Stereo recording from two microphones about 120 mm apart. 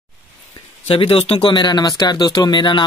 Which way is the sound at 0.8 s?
50° left (ahead or behind).